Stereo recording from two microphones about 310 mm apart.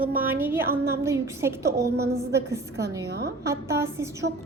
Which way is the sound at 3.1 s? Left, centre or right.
Right.